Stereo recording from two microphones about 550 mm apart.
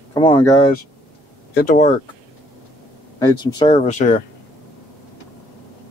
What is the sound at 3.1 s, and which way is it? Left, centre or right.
Speech, centre.